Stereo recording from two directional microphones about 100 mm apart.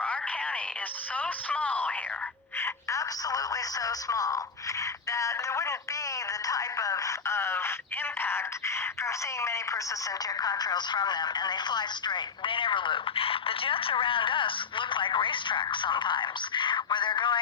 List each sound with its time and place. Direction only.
0.0 s a sound: 10° left (ahead or behind)
1.1 s speech: 15° left (ahead or behind)
3.0 s speech: 35° left (ahead or behind)
5.1 s telephone: 30° left (ahead or behind)
10.2 s speech: 40° left (ahead or behind)